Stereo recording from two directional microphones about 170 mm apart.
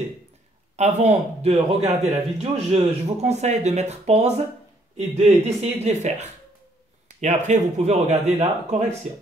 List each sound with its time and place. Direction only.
0.7 s speech: 40° right (ahead or behind)